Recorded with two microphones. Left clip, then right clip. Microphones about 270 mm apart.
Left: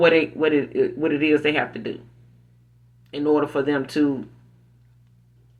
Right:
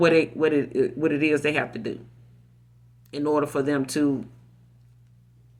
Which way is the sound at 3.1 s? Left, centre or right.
Right.